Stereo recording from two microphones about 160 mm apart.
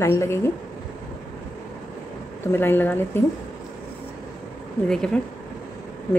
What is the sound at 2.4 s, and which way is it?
Speech, 15° left (ahead or behind).